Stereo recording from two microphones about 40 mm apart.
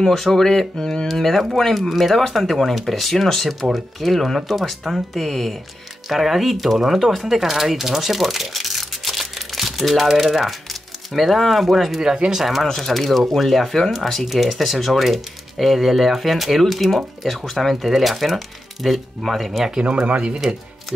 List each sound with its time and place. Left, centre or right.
0.0 s speech: centre
12.6 s speech: centre
20.1 s speech: right